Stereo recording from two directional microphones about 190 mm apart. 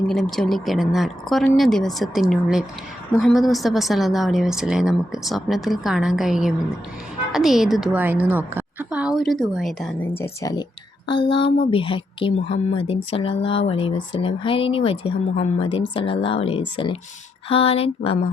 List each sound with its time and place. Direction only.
0.1 s speech: centre (ahead or behind)
10.2 s speech: 15° left (ahead or behind)